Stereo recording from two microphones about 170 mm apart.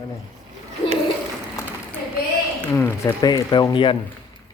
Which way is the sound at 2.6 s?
15° left (ahead or behind).